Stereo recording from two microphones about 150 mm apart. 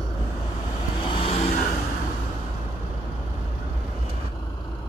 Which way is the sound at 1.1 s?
40° left (ahead or behind).